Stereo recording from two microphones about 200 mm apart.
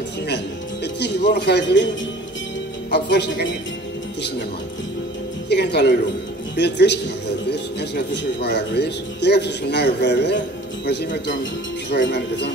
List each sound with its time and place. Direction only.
0.9 s speech: 55° left (ahead or behind)
2.9 s speech: 55° left (ahead or behind)
5.5 s speech: 55° left (ahead or behind)